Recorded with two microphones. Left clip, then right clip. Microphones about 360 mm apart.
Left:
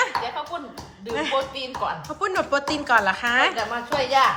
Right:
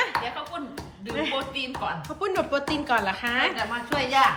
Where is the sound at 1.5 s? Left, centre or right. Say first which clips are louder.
Even; left.